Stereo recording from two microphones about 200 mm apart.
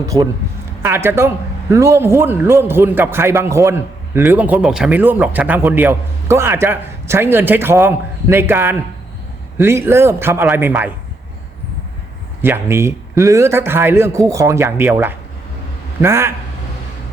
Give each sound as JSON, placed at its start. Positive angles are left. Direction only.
{"t": 0.0, "sound": "a man's voice", "side_deg": -15}
{"t": 12.4, "sound": "a man's voice", "side_deg": -10}